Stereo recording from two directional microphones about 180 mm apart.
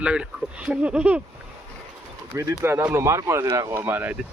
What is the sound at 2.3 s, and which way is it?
Speech, 15° right (ahead or behind).